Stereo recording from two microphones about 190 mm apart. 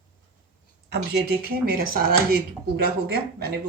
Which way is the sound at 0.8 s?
60° right (ahead or behind).